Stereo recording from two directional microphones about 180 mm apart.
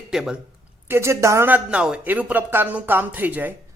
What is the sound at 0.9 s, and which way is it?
Speech, 15° right (ahead or behind).